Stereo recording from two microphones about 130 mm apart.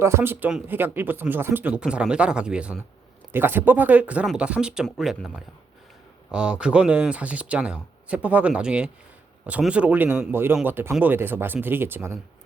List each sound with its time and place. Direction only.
0.0 s speech: 20° right (ahead or behind); by 5.3 s centre (ahead or behind)
6.3 s speech: 5° right (ahead or behind)